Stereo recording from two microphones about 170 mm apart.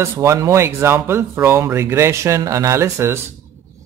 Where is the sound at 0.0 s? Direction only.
15° right (ahead or behind).